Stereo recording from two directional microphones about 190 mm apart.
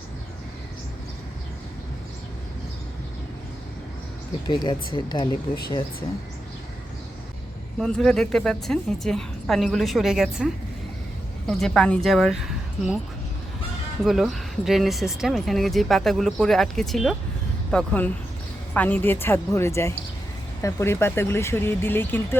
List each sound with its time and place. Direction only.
4.4 s speech: 25° left (ahead or behind)
7.8 s speech: 5° left (ahead or behind)
14.0 s speech: centre (ahead or behind)